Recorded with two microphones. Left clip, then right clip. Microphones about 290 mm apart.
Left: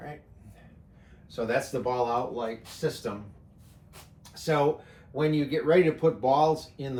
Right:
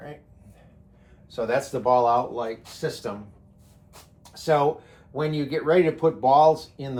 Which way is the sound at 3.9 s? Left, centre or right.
Centre.